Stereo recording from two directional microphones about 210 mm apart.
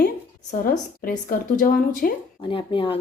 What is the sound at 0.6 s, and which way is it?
A woman's voice, 40° left (ahead or behind).